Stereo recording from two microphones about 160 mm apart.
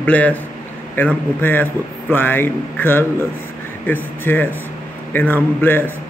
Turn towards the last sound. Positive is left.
turn(degrees=10)  # may be behind; listen again after turning